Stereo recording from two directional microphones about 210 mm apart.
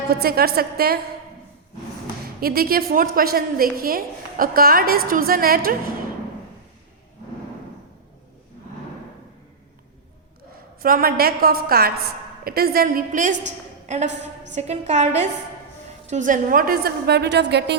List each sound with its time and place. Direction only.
0.1 s a woman's voice: 45° right (ahead or behind)
2.4 s a woman's voice: 45° right (ahead or behind)
10.8 s a woman's voice: 45° right (ahead or behind)